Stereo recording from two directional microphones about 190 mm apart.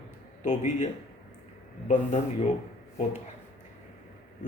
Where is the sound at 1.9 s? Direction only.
40° left (ahead or behind).